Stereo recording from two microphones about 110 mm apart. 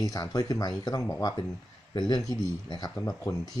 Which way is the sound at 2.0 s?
40° left (ahead or behind).